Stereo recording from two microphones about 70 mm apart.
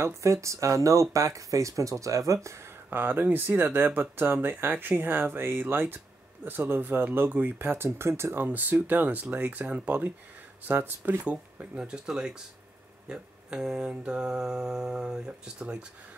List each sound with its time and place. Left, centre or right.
0.0 s speech: right
2.9 s speech: right
8.5 s speech: right
10.7 s mantra: right